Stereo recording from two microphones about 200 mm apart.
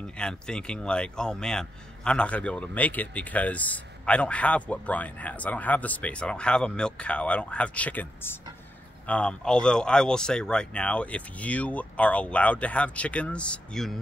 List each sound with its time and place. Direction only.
0.0 s speech: 5° left (ahead or behind)